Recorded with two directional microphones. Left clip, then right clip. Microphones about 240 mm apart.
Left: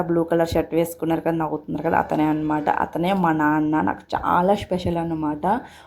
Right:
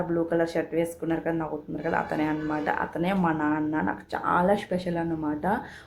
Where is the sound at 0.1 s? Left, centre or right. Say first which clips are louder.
Left 6 dB; left.